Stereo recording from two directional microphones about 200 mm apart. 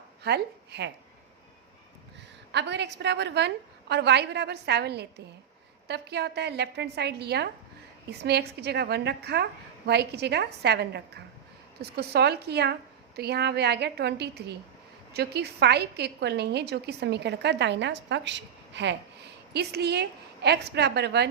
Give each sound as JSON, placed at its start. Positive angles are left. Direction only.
{"t": 0.2, "sound": "a woman's voice", "side_deg": -55}
{"t": 2.5, "sound": "a woman's voice", "side_deg": -60}